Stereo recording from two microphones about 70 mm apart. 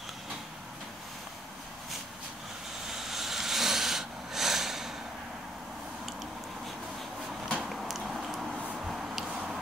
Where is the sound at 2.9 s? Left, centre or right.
Centre.